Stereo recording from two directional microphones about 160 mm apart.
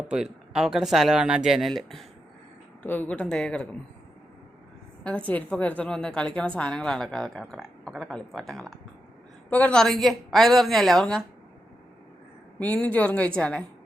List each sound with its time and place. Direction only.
0.1 s a woman's voice: 5° right (ahead or behind)
2.8 s a woman's voice: 10° left (ahead or behind)
5.0 s a woman's voice: 10° left (ahead or behind)
12.5 s a woman's voice: 10° left (ahead or behind)